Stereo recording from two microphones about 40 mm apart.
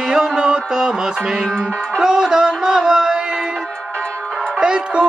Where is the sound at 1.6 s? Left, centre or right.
Centre.